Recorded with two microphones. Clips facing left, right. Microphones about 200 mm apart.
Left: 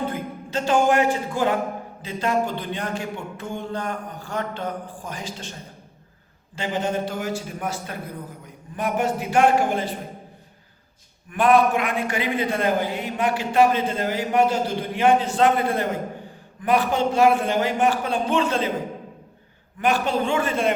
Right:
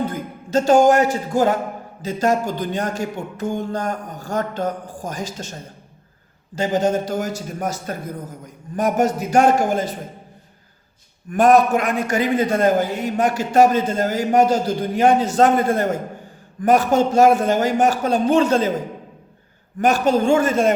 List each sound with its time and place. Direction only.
0.0 s a man's voice: 40° right (ahead or behind)
6.6 s a man's voice: 40° right (ahead or behind)
11.3 s a man's voice: 45° right (ahead or behind)
19.8 s a man's voice: 45° right (ahead or behind)